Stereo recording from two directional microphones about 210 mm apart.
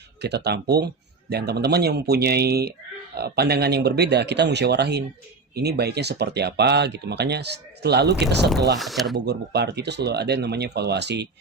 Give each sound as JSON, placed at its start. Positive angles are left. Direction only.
{"t": 0.2, "sound": "speech", "side_deg": -50}
{"t": 8.8, "sound": "speech", "side_deg": 0}
{"t": 9.2, "sound": "speech", "side_deg": -50}